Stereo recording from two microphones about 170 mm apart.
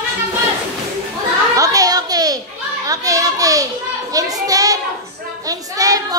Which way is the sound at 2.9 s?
20° right (ahead or behind).